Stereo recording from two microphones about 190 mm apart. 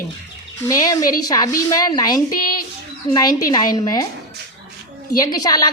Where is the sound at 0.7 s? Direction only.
20° left (ahead or behind).